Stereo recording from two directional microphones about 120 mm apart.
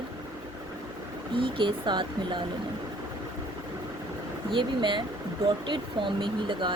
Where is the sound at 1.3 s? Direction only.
45° right (ahead or behind).